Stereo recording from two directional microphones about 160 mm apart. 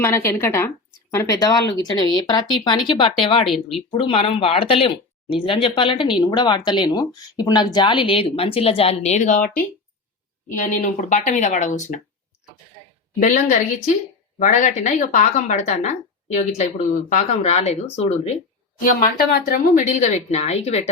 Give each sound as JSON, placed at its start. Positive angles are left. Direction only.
{"t": 0.0, "sound": "a woman's voice", "side_deg": 15}
{"t": 3.5, "sound": "speech", "side_deg": 0}
{"t": 3.9, "sound": "speech", "side_deg": 35}
{"t": 13.1, "sound": "speech", "side_deg": 50}
{"t": 18.9, "sound": "speech", "side_deg": 65}